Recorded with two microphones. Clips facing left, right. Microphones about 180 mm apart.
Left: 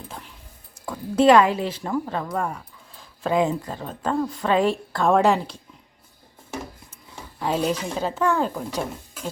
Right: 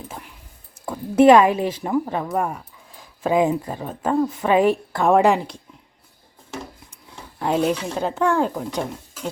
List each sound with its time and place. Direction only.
1.2 s a woman's voice: 15° right (ahead or behind)
7.3 s a sound: 10° right (ahead or behind)
7.6 s a woman's voice: 10° right (ahead or behind)